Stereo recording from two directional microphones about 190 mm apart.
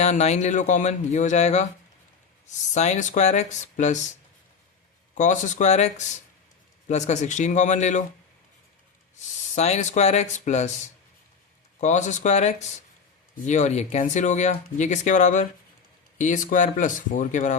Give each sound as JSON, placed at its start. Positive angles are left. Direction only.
{"t": 0.0, "sound": "speech", "side_deg": 35}
{"t": 2.7, "sound": "speech", "side_deg": 35}
{"t": 5.1, "sound": "speech", "side_deg": 40}
{"t": 9.6, "sound": "speech", "side_deg": 35}
{"t": 11.8, "sound": "speech", "side_deg": 40}